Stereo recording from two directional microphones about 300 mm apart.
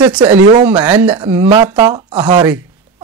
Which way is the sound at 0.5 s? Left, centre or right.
Centre.